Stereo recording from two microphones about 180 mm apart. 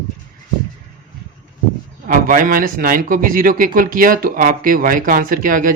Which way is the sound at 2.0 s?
50° right (ahead or behind).